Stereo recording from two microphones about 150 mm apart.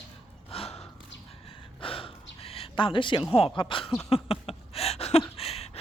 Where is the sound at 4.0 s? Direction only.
40° left (ahead or behind).